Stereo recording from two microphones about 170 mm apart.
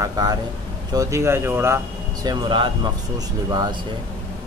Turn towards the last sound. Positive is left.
turn(degrees=-25)  # may be behind; listen again after turning